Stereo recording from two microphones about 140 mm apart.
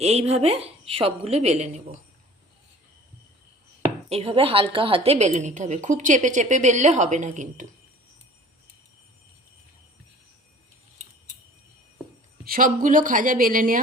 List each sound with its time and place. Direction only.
0.0 s a woman's voice: 50° right (ahead or behind)
4.1 s a woman's voice: 45° right (ahead or behind)
5.1 s a woman's voice: 55° right (ahead or behind)
12.5 s speech: 85° right